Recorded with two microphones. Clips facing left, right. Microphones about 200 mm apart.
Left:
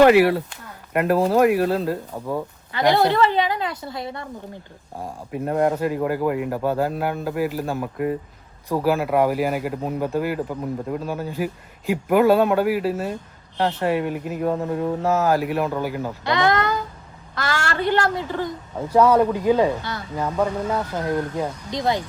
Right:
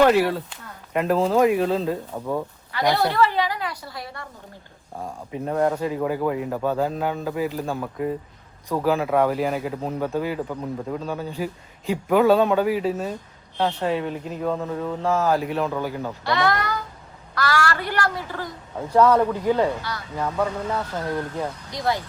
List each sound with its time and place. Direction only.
0.0 s speech: 10° left (ahead or behind)
2.7 s a woman's voice: 20° left (ahead or behind)
5.3 s speech: 10° left (ahead or behind)
16.2 s a woman's voice: 20° left (ahead or behind)
21.3 s speech: 20° left (ahead or behind)